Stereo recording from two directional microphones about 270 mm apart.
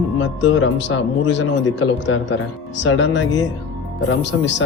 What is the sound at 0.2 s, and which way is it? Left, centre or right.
Speech, left.